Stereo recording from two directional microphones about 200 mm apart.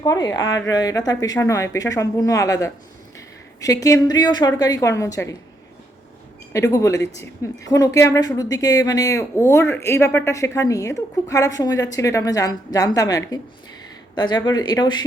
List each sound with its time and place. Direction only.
0.0 s a woman's voice: 20° left (ahead or behind)
6.5 s a woman's voice: 15° left (ahead or behind)